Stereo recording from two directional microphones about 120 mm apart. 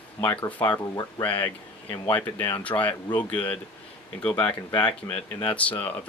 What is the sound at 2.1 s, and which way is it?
Speech, 15° left (ahead or behind).